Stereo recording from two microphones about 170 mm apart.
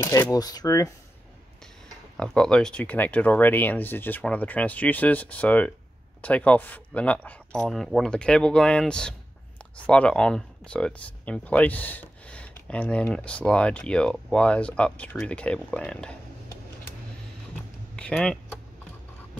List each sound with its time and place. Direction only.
0.0 s speech: 15° left (ahead or behind)
2.1 s speech: 5° left (ahead or behind)
17.9 s speech: 5° left (ahead or behind)